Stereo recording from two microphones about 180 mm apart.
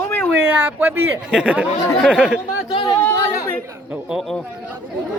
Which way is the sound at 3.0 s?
10° left (ahead or behind).